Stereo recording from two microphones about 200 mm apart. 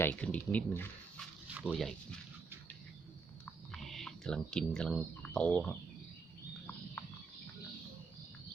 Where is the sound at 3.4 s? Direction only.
5° left (ahead or behind).